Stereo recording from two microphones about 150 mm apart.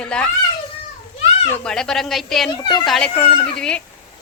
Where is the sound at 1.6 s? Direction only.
5° left (ahead or behind).